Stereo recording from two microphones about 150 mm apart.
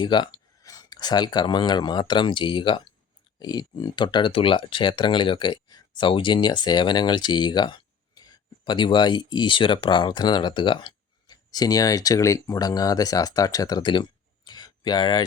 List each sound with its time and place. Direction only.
0.0 s speech: 30° left (ahead or behind)